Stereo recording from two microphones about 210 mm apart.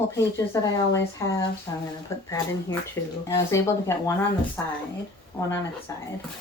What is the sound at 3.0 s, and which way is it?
Speech, 10° left (ahead or behind).